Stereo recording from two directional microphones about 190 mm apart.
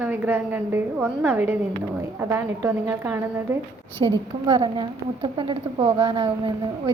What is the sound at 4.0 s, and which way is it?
A woman's voice, 25° right (ahead or behind).